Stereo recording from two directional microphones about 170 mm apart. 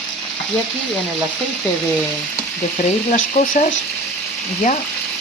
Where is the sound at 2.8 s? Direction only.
50° left (ahead or behind).